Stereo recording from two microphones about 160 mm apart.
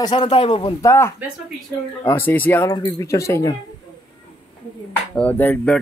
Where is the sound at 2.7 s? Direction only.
25° left (ahead or behind).